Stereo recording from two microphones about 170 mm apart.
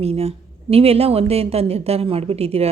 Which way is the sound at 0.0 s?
35° right (ahead or behind).